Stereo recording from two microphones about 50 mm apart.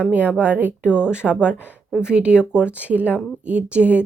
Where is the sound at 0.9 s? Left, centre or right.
Right.